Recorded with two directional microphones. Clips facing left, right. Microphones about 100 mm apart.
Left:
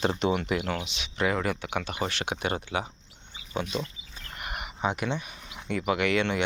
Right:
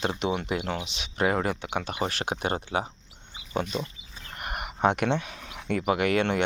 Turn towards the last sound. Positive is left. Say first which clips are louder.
# right 2 dB
turn(degrees=-45)  # may be behind; listen again after turning